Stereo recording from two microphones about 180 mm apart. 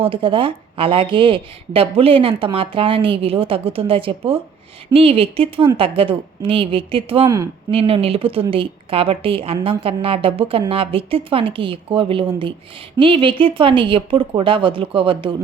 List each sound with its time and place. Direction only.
0.0 s speech: 30° right (ahead or behind)